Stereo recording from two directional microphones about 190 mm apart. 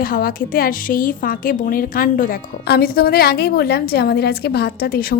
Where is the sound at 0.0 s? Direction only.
50° left (ahead or behind).